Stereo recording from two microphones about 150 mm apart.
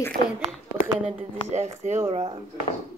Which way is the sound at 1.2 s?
50° right (ahead or behind).